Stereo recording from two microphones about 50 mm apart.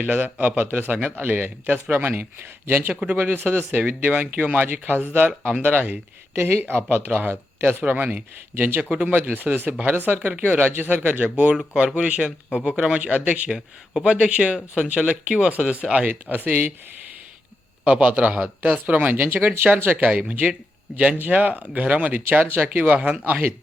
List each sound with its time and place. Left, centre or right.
0.0 s speech: right
2.9 s speech: right
3.2 s speech: right
6.3 s speech: right
6.9 s speech: right
7.8 s speech: right
10.2 s speech: right
11.5 s speech: centre
13.5 s speech: centre
16.0 s speech: right
17.8 s speech: right
20.1 s speech: right